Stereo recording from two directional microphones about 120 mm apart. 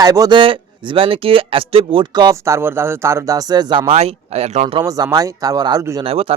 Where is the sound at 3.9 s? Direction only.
60° right (ahead or behind).